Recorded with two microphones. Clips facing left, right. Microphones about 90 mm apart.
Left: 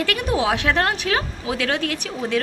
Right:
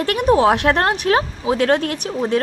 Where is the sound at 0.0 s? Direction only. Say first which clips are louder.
Right 7 dB; 40° right (ahead or behind).